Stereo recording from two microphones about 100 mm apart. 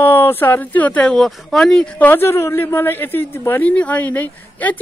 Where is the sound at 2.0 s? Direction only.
25° left (ahead or behind).